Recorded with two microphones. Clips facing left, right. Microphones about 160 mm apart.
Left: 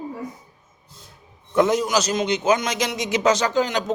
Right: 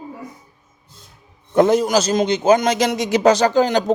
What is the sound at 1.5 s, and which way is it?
A man's voice, 35° right (ahead or behind).